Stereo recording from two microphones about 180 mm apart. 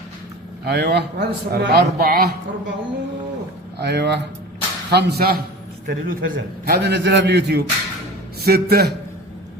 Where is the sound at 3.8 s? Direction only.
65° right (ahead or behind).